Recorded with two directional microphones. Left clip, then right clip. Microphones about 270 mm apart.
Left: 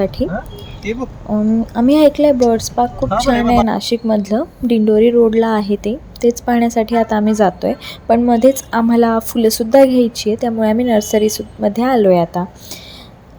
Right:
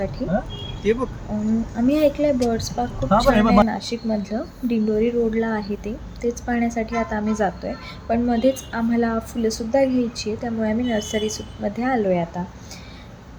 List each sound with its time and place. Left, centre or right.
1.7 s a woman's voice: left